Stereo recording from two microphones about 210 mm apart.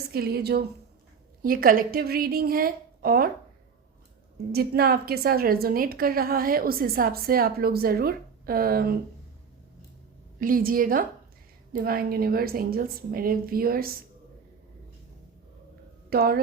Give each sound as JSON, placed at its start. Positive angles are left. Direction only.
{"t": 0.1, "sound": "a woman's voice", "side_deg": -45}
{"t": 4.5, "sound": "a woman's voice", "side_deg": -50}
{"t": 10.4, "sound": "a woman's voice", "side_deg": -40}
{"t": 16.0, "sound": "speech", "side_deg": -45}